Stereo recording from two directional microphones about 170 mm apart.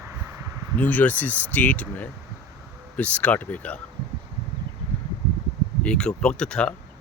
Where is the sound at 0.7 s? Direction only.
10° left (ahead or behind).